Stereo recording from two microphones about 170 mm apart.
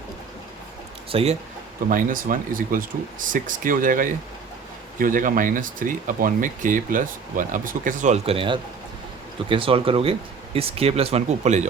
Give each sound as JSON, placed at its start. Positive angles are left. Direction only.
{"t": 1.1, "sound": "speech", "side_deg": -35}
{"t": 1.9, "sound": "speech", "side_deg": -55}